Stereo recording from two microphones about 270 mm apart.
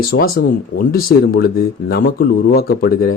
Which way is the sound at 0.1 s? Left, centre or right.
Left.